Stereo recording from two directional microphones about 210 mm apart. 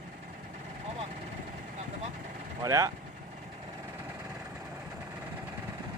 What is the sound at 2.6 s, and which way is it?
Speech, 15° right (ahead or behind).